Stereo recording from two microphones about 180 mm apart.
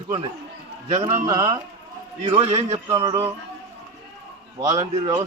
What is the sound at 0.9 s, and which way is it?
Speech, 40° right (ahead or behind).